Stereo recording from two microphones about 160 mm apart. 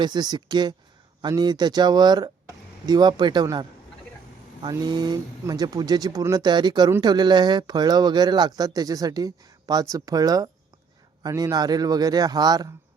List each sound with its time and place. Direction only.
0.0 s speech: 25° right (ahead or behind)